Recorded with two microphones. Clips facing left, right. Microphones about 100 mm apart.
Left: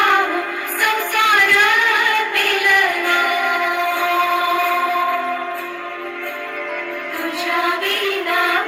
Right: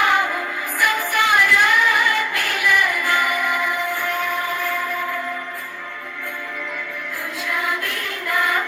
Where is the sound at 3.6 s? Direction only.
65° left (ahead or behind); by 5.3 s 80° left.